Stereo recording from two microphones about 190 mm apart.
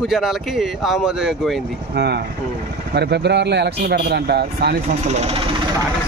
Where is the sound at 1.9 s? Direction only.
60° right (ahead or behind).